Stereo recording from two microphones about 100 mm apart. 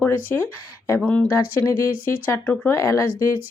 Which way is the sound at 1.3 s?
25° left (ahead or behind).